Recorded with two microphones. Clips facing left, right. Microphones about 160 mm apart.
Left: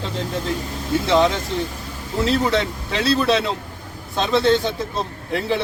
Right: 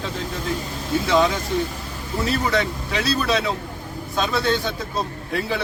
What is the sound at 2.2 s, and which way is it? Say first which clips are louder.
Speech: left 3 dB; 25° left (ahead or behind).